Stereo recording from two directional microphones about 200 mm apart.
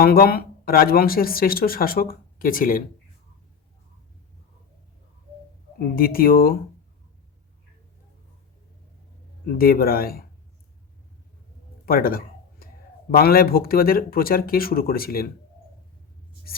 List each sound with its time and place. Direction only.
0.0 s speech: 50° left (ahead or behind)
5.9 s speech: 45° left (ahead or behind)
9.5 s speech: 50° left (ahead or behind)
11.9 s a sound: 45° left (ahead or behind)
13.1 s speech: 50° left (ahead or behind)